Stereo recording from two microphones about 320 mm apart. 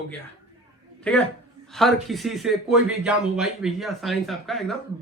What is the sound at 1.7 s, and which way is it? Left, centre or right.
Speech, centre.